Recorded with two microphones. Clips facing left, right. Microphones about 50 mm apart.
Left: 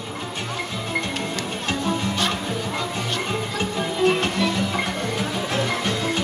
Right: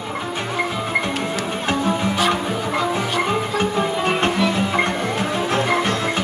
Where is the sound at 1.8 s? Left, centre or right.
Centre.